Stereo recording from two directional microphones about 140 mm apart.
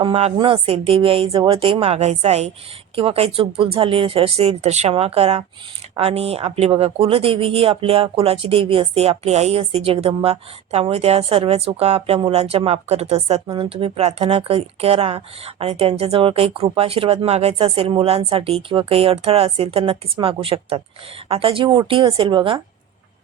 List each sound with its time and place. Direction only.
0.0 s a woman's voice: 45° right (ahead or behind)